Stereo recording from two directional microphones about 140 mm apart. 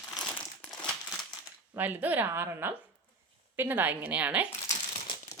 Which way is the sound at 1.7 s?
10° right (ahead or behind).